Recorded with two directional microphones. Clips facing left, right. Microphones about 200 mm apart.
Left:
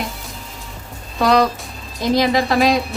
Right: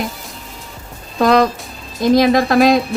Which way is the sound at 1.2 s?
50° right (ahead or behind).